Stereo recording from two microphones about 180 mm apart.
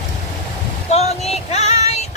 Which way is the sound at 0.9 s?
35° left (ahead or behind).